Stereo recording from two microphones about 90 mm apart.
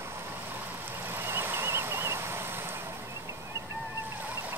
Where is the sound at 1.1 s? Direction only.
25° right (ahead or behind).